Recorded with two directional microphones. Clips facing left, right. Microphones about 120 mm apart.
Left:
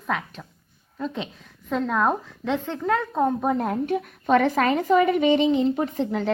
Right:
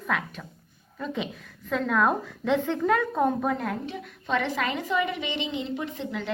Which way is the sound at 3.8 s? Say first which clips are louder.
Left 10 dB; 55° left (ahead or behind).